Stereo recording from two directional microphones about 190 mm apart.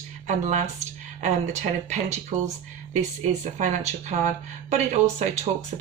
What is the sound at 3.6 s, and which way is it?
Speech, 40° right (ahead or behind).